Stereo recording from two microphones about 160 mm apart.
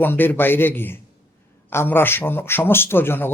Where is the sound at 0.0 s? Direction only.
10° left (ahead or behind).